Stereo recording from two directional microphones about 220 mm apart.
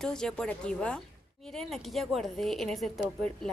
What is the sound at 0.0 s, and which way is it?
A woman's voice, 5° left (ahead or behind).